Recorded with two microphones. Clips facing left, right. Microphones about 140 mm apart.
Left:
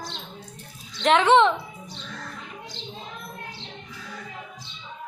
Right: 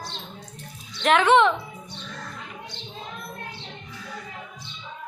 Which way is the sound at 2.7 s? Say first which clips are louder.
Left 1 dB; 90° left.